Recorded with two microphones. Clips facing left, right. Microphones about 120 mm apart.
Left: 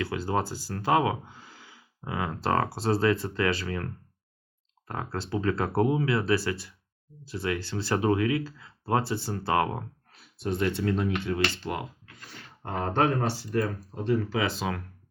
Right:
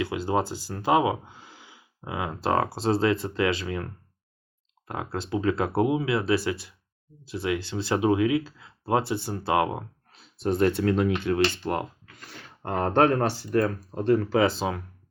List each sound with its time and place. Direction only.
0.0 s speech: 20° right (ahead or behind)
4.9 s speech: 15° right (ahead or behind)
10.4 s speech: 40° right (ahead or behind)
10.7 s speech: 60° right (ahead or behind); by 11.4 s 80° right
11.6 s speech: 45° right (ahead or behind)
14.4 s speech: 30° right (ahead or behind)